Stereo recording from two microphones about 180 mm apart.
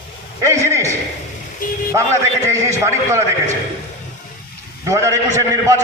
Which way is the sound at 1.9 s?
15° right (ahead or behind).